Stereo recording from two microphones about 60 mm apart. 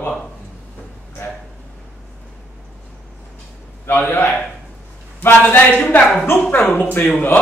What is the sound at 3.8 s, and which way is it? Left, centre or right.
A man's voice, left.